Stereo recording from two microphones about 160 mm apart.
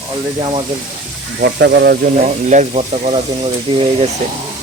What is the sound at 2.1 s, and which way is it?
Speech, 50° right (ahead or behind).